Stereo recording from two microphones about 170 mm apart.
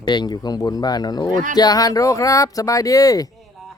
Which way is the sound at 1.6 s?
20° left (ahead or behind).